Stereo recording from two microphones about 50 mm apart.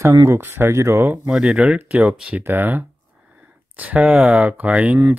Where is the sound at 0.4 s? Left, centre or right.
Right.